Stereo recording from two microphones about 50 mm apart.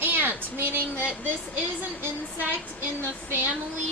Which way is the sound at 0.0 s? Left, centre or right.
Right.